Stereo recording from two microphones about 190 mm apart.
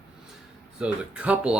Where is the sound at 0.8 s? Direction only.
5° right (ahead or behind).